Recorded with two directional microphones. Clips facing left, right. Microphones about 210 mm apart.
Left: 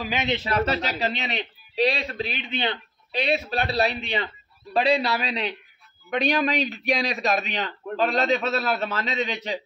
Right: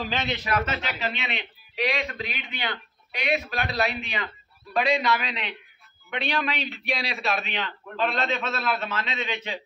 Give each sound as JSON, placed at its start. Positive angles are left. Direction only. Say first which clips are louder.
{"t": 0.0, "sound": "a man's voice", "louder": "left 3 dB", "side_deg": 15}
{"t": 0.4, "sound": "a man's voice", "louder": "left 3 dB", "side_deg": 30}